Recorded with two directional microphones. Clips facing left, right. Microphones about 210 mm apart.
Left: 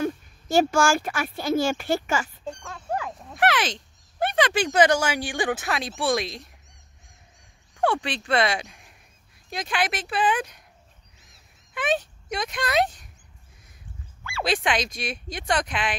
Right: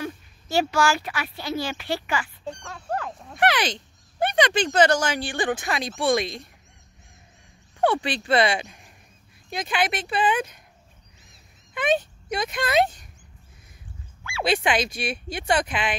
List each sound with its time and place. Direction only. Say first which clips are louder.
0.0 s speech: left 6 dB; 45° left (ahead or behind)
2.4 s speech: even; centre (ahead or behind)
7.8 s speech: right 2 dB; centre (ahead or behind)
11.7 s speech: right 3 dB; centre (ahead or behind)
14.4 s speech: right 2 dB; 5° right (ahead or behind)